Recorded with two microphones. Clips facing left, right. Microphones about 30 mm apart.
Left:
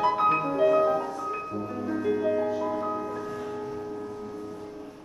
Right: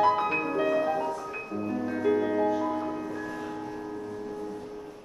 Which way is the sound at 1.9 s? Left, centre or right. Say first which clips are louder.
Left 1 dB; centre.